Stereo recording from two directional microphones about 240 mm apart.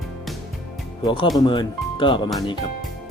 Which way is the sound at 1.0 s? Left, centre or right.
Centre.